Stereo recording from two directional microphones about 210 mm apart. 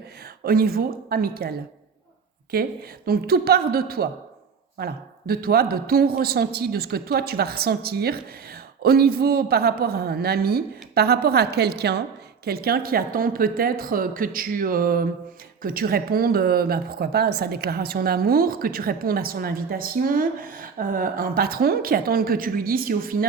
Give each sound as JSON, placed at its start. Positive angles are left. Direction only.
{"t": 0.4, "sound": "a woman's voice", "side_deg": -45}